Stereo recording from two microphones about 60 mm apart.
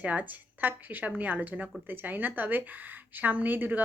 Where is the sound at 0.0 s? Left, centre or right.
Right.